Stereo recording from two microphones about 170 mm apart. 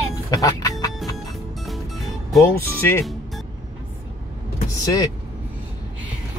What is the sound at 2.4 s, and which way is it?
Speech, 15° left (ahead or behind).